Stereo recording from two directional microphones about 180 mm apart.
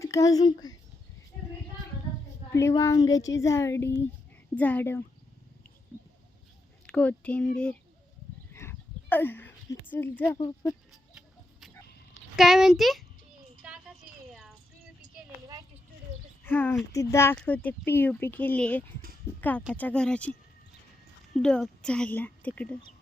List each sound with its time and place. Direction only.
0.0 s speech: 15° left (ahead or behind)
2.6 s speech: 15° left (ahead or behind)
6.8 s speech: 5° left (ahead or behind)
8.5 s a sound: 10° left (ahead or behind)
10.3 s speech: 25° left (ahead or behind)
12.4 s speech: centre (ahead or behind)
13.6 s a sound: 5° right (ahead or behind)
16.4 s speech: 10° left (ahead or behind)
21.3 s speech: 5° left (ahead or behind)